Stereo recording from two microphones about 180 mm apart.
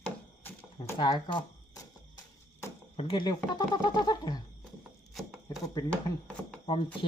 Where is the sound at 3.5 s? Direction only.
20° left (ahead or behind).